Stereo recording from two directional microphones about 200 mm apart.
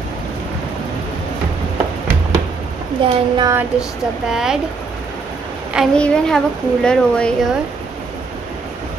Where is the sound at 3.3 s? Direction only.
15° right (ahead or behind).